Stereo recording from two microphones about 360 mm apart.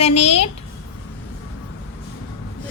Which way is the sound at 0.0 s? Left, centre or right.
Centre.